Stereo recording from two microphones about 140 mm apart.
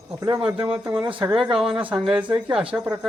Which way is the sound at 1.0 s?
35° right (ahead or behind).